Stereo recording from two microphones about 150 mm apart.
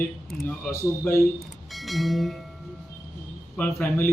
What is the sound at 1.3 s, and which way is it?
Speech, centre (ahead or behind).